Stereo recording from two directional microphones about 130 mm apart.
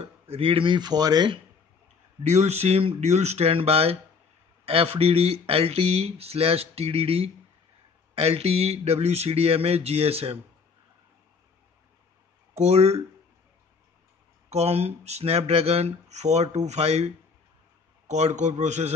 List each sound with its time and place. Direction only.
0.0 s speech: 45° right (ahead or behind)
2.2 s speech: 60° right (ahead or behind)
12.5 s speech: 55° right (ahead or behind)
14.5 s speech: 55° right (ahead or behind)